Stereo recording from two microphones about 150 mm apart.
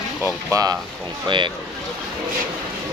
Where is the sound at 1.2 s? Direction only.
35° right (ahead or behind).